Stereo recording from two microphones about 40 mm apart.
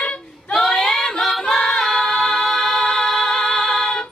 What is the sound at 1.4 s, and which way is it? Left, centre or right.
Music, centre.